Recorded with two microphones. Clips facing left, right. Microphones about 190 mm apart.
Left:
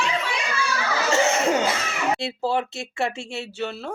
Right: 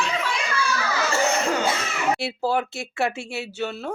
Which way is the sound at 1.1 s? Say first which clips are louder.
Left 3 dB; 20° left (ahead or behind).